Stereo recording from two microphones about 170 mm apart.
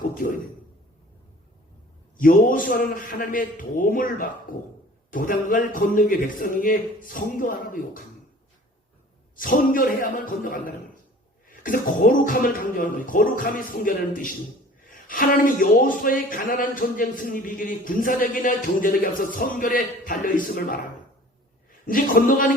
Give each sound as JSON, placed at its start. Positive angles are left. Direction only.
{"t": 2.1, "sound": "a man's voice", "side_deg": 55}
{"t": 9.3, "sound": "a man's voice", "side_deg": 55}
{"t": 21.8, "sound": "speech", "side_deg": 55}